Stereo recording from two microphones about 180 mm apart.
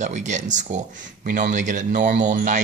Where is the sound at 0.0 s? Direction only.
40° right (ahead or behind).